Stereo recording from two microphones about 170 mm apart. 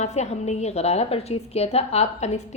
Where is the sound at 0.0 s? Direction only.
40° left (ahead or behind).